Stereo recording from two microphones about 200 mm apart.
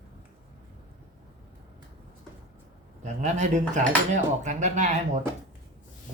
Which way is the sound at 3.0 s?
35° right (ahead or behind).